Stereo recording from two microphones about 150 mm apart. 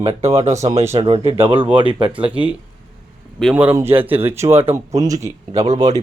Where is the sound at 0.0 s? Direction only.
45° right (ahead or behind).